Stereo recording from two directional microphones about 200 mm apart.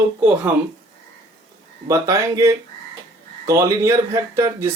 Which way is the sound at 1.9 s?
15° right (ahead or behind).